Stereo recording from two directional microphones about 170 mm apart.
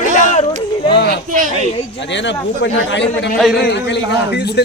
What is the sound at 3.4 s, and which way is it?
Speech, centre (ahead or behind).